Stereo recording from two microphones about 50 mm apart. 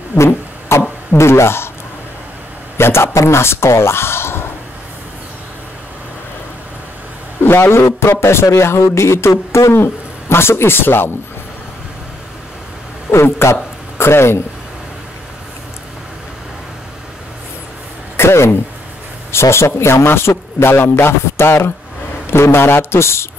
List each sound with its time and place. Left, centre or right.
0.2 s a sound: left
1.1 s a man's voice: left
2.8 s a man's voice: left
7.4 s a man's voice: left
13.1 s a man's voice: left
18.1 s a man's voice: left